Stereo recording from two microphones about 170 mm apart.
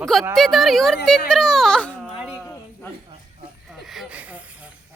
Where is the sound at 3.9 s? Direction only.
5° right (ahead or behind).